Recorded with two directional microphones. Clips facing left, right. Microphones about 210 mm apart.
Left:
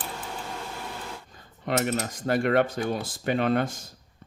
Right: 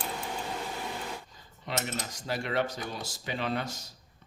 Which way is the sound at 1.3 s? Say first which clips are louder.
Left 8 dB; 55° left (ahead or behind).